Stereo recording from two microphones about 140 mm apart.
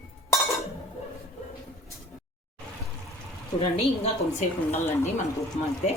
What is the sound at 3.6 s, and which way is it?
Speech, 45° left (ahead or behind).